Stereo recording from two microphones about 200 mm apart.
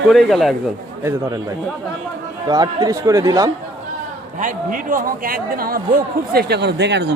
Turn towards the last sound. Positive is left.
turn(degrees=-60)  # may be behind; listen again after turning